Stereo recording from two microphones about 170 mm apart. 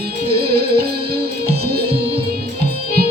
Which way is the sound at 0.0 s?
65° right (ahead or behind).